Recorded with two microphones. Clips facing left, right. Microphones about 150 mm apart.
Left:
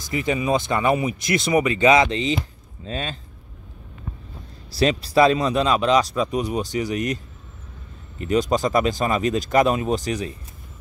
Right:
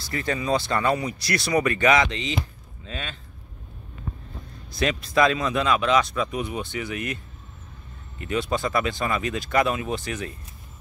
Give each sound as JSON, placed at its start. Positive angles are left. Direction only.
{"t": 0.1, "sound": "speech", "side_deg": 15}
{"t": 4.6, "sound": "speech", "side_deg": 30}
{"t": 8.2, "sound": "speech", "side_deg": 35}
{"t": 9.0, "sound": "speech", "side_deg": 30}